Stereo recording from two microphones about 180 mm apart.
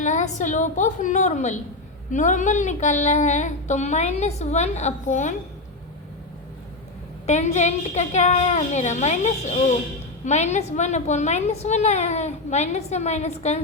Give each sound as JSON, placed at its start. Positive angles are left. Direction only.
{"t": 0.0, "sound": "a woman's voice", "side_deg": 40}
{"t": 7.3, "sound": "a woman's voice", "side_deg": 40}